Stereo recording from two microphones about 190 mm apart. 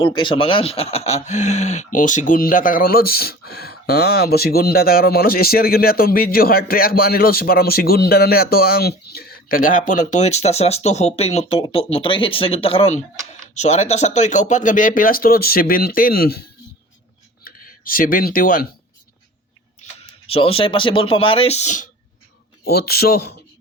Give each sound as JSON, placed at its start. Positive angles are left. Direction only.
{"t": 0.0, "sound": "speech", "side_deg": 25}
{"t": 19.8, "sound": "speech", "side_deg": 30}
{"t": 22.6, "sound": "a man's voice", "side_deg": 55}